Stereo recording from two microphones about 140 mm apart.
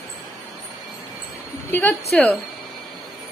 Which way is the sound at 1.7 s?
15° left (ahead or behind).